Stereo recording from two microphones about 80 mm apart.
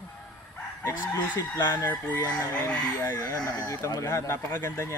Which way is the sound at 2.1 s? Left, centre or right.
Left.